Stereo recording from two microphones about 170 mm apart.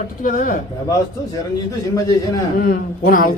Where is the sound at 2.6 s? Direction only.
60° left (ahead or behind).